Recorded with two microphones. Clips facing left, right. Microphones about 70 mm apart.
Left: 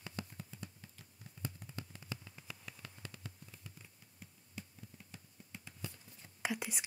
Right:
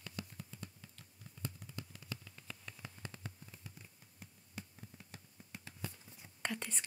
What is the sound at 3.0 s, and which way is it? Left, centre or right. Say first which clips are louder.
Fireworks: right 2 dB; right.